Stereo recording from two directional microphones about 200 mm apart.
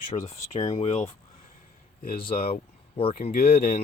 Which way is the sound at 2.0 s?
45° left (ahead or behind).